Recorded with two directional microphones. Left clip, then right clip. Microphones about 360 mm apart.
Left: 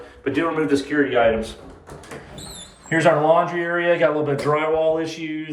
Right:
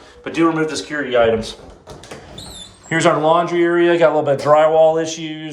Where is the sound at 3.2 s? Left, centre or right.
Centre.